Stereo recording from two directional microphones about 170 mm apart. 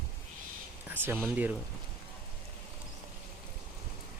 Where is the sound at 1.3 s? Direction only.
10° right (ahead or behind).